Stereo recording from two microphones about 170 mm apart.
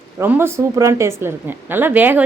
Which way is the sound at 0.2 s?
15° right (ahead or behind).